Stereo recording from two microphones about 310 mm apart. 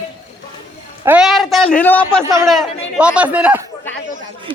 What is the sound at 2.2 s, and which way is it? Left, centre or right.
A man's voice, centre.